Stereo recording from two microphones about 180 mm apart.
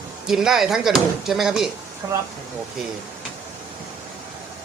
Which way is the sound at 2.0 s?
20° right (ahead or behind).